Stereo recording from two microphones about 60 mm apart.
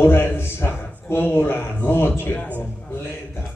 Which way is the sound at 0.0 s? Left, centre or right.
Left.